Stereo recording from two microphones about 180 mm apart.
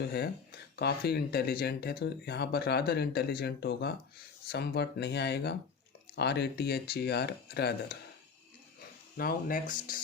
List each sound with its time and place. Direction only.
0.0 s speech: 65° left (ahead or behind)
9.1 s speech: 50° left (ahead or behind)